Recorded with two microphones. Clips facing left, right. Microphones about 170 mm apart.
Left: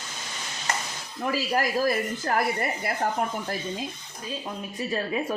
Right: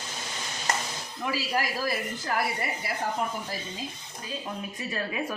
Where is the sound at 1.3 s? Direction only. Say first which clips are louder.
Left 4 dB; 45° left (ahead or behind).